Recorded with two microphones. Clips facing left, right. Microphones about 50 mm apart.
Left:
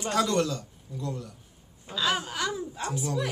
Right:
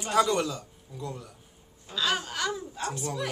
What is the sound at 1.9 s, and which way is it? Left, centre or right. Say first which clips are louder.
Speech: left 1 dB; centre.